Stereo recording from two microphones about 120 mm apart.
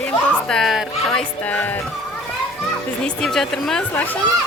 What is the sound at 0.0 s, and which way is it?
Speech, 10° left (ahead or behind).